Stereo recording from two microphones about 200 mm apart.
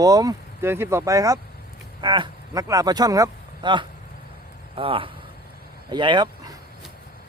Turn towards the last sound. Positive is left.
turn(degrees=-20)  # may be behind; listen again after turning